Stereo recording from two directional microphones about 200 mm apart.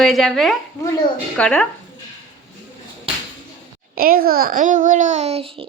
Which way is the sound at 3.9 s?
45° right (ahead or behind).